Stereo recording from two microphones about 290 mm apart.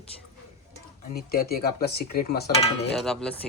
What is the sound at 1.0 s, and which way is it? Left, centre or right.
Speech, left.